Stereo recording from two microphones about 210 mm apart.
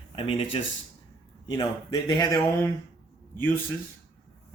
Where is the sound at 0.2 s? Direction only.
25° left (ahead or behind).